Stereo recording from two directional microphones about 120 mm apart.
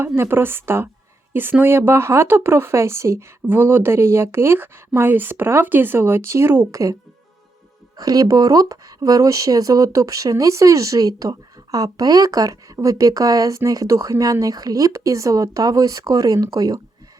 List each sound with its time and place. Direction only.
0.2 s speech: 20° right (ahead or behind)
7.9 s speech: 30° right (ahead or behind)